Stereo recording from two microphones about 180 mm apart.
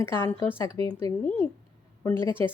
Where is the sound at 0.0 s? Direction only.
15° left (ahead or behind).